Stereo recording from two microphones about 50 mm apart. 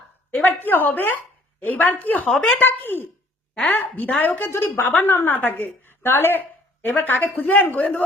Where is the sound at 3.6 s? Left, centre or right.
Left.